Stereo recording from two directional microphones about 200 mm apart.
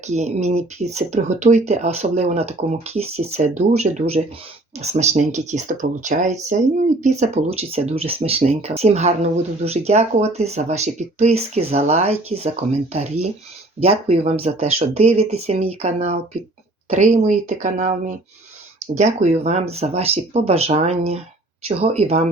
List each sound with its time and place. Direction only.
0.1 s speech: 35° right (ahead or behind)